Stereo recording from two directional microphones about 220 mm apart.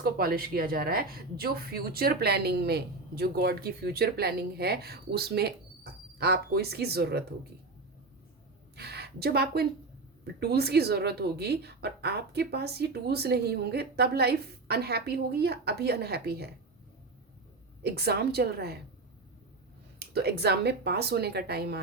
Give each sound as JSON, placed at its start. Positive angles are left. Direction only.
{"t": 0.0, "sound": "speech", "side_deg": -40}
{"t": 8.7, "sound": "a woman's voice", "side_deg": -45}
{"t": 17.8, "sound": "speech", "side_deg": -45}
{"t": 20.0, "sound": "speech", "side_deg": -45}